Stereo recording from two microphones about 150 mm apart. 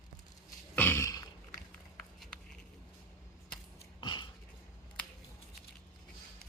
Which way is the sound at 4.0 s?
35° left (ahead or behind).